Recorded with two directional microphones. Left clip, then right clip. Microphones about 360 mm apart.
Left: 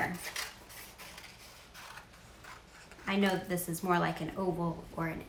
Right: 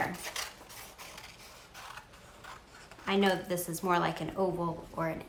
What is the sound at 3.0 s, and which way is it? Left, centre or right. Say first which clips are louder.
A woman's voice: right 3 dB; centre.